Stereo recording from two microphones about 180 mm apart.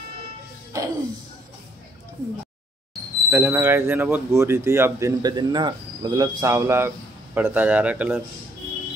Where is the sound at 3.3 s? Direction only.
10° right (ahead or behind).